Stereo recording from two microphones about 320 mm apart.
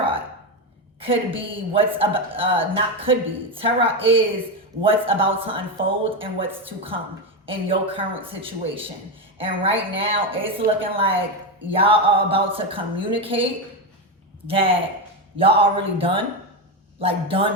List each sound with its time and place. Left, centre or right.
0.9 s speech: centre